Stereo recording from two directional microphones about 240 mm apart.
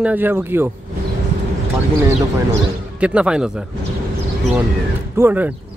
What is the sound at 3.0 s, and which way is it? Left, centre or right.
Speech, centre.